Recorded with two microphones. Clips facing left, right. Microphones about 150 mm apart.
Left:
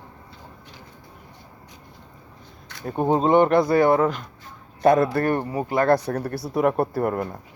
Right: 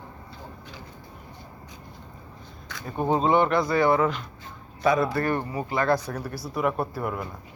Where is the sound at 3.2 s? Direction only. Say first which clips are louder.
Left 5 dB; 50° left (ahead or behind).